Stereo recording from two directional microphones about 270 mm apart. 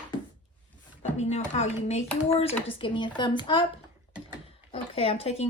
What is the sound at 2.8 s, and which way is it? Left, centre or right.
Speech, centre.